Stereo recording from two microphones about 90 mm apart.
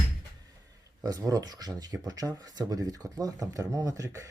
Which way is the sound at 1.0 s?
40° right (ahead or behind).